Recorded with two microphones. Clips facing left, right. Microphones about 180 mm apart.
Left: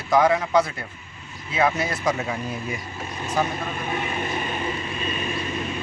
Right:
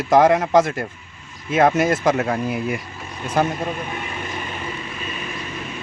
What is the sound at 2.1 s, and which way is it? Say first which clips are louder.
Speech: right 6 dB; 60° right (ahead or behind).